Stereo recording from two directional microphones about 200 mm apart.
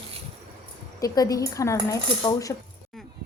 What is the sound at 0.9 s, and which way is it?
A woman's voice, 20° left (ahead or behind).